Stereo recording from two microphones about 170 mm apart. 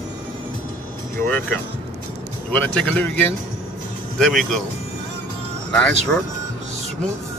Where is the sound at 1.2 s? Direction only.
10° left (ahead or behind).